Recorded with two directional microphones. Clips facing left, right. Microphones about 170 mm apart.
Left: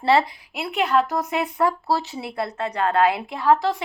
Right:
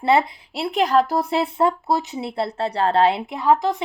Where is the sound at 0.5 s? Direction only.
35° right (ahead or behind).